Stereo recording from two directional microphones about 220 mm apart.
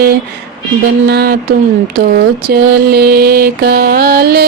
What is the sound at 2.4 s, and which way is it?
Music, 45° right (ahead or behind).